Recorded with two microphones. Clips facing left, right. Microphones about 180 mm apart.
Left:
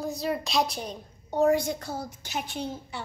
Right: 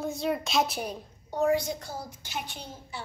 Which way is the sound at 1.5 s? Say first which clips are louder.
Left 2 dB; 55° left (ahead or behind).